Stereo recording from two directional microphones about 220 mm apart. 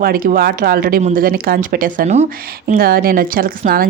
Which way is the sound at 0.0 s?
40° right (ahead or behind).